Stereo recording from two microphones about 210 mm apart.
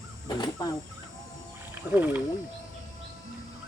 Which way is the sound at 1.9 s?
10° right (ahead or behind).